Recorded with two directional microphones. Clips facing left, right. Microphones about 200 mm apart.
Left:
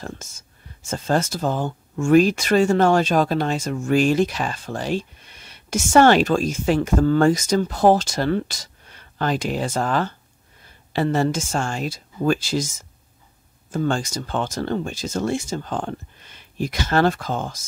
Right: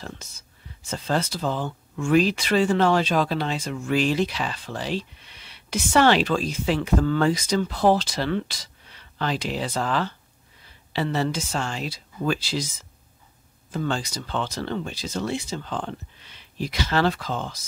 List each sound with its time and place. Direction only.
0.0 s speech: 45° left (ahead or behind)